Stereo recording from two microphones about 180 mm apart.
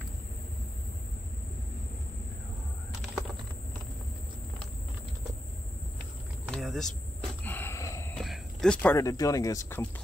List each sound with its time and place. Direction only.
6.5 s vehicle: centre (ahead or behind)
7.4 s gasp: 10° left (ahead or behind)
8.2 s a sound: centre (ahead or behind)
8.9 s speech: 20° left (ahead or behind)